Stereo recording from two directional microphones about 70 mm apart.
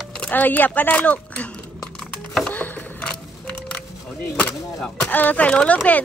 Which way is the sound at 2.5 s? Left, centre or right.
Left.